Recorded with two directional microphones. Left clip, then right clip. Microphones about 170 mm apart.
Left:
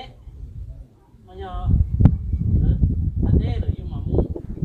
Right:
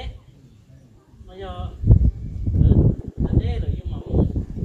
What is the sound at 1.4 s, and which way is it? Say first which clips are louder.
Speech: even; 25° left (ahead or behind).